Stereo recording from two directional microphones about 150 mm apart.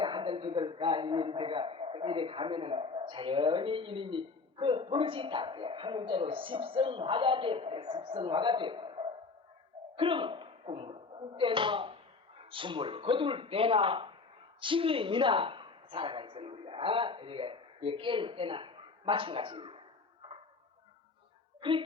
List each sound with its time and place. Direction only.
0.0 s a man's voice: 30° right (ahead or behind)
21.6 s speech: 35° right (ahead or behind)